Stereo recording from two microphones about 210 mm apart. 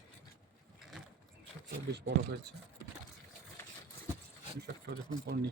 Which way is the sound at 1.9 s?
55° right (ahead or behind).